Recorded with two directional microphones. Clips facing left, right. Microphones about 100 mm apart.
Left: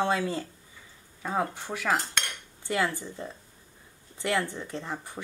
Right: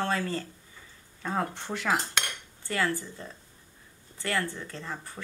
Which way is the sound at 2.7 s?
15° left (ahead or behind).